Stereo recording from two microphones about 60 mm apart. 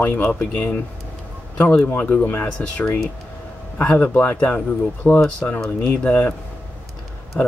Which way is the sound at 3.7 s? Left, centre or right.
Left.